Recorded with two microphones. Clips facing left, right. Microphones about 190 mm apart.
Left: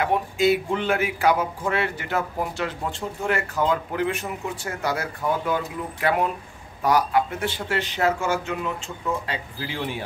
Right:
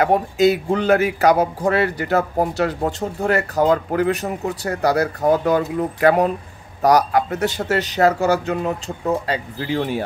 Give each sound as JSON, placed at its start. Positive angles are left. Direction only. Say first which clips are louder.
{"t": 0.0, "sound": "speech", "louder": "right 6 dB", "side_deg": -40}